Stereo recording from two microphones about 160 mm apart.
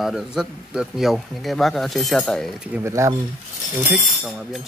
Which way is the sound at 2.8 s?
20° right (ahead or behind).